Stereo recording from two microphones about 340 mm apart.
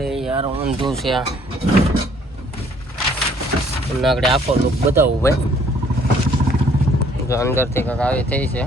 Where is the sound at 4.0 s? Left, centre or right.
Centre.